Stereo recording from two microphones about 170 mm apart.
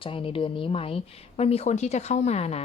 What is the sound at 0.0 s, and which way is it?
Speech, 30° left (ahead or behind).